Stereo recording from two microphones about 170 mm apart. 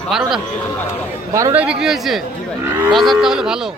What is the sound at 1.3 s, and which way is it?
Speech, 20° right (ahead or behind).